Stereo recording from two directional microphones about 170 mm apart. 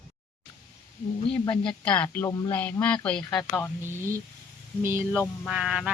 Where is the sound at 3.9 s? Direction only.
15° right (ahead or behind).